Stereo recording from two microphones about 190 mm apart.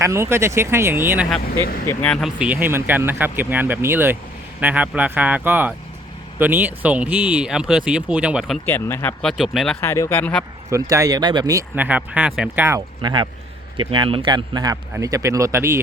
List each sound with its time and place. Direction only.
0.0 s speech: 15° right (ahead or behind)
1.9 s speech: 5° left (ahead or behind)
8.6 s speech: 10° left (ahead or behind)
9.8 s speech: 15° left (ahead or behind)
10.7 s speech: 15° right (ahead or behind)